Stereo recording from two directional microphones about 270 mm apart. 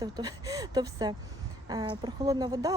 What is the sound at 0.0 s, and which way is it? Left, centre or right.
Speech, centre.